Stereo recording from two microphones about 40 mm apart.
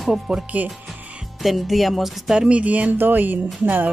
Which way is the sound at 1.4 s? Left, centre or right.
Centre.